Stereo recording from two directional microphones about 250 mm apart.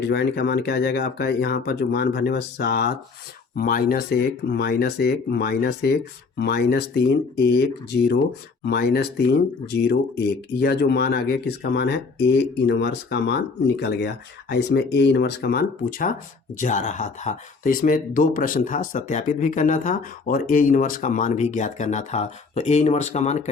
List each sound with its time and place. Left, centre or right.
0.0 s speech: left
10.6 s speech: left